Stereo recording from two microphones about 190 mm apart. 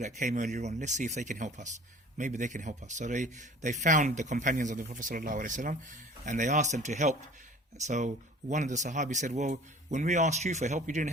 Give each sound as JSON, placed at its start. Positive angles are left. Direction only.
{"t": 0.0, "sound": "speech", "side_deg": -40}